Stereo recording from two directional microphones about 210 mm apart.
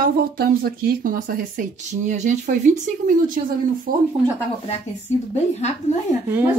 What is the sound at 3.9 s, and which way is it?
Speech, 40° right (ahead or behind).